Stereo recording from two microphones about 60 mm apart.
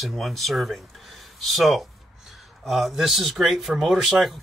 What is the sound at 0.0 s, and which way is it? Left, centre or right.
Speech, centre.